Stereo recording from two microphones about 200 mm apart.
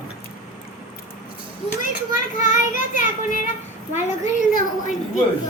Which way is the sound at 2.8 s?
40° left (ahead or behind).